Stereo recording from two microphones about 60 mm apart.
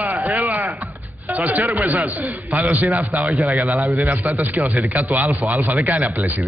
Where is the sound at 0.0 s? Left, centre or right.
Right.